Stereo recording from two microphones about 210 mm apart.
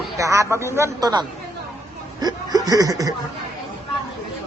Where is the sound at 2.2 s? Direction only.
20° right (ahead or behind).